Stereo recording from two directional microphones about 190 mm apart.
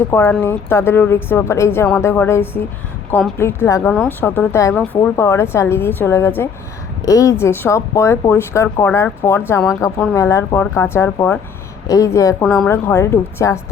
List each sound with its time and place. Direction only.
0.1 s speech: 10° left (ahead or behind)
3.8 s speech: 5° left (ahead or behind)
12.4 s a woman's voice: centre (ahead or behind)
12.6 s speech: 15° left (ahead or behind)